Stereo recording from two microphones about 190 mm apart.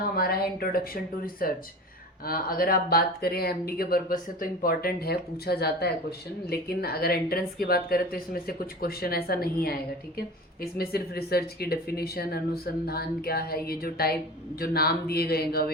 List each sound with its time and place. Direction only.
0.2 s speech: 55° left (ahead or behind)